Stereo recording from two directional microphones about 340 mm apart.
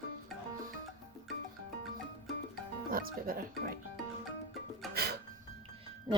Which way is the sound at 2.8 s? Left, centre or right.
Right.